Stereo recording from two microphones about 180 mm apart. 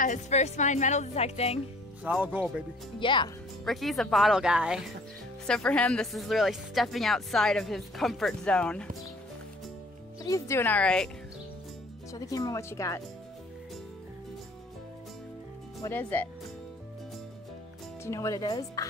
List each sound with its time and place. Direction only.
0.0 s a woman's voice: 40° left (ahead or behind)
2.0 s speech: 10° right (ahead or behind)
3.0 s speech: 25° left (ahead or behind)
3.6 s speech: centre (ahead or behind)
10.2 s speech: 15° left (ahead or behind)
12.1 s speech: 20° left (ahead or behind)
15.8 s speech: 10° left (ahead or behind)
18.0 s speech: 15° left (ahead or behind)